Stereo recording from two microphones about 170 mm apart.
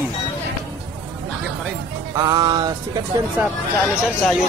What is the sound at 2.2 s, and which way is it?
Music, 25° right (ahead or behind).